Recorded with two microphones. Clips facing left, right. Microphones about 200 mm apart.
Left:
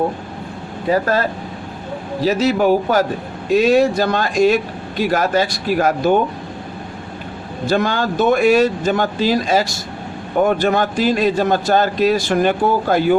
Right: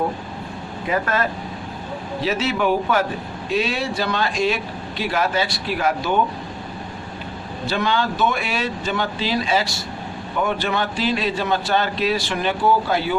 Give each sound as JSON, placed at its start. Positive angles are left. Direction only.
{"t": 0.9, "sound": "a man's voice", "side_deg": 35}
{"t": 7.7, "sound": "a man's voice", "side_deg": 45}